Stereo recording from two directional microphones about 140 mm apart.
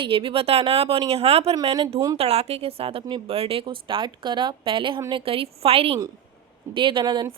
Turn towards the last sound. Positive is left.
turn(degrees=-35)  # may be behind; listen again after turning